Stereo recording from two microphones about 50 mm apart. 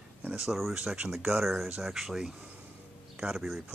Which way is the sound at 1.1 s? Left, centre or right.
Centre.